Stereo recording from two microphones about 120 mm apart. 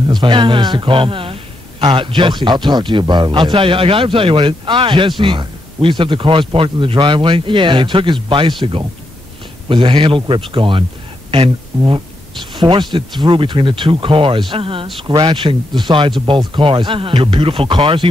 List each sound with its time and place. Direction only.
0.1 s a man's voice: 40° right (ahead or behind)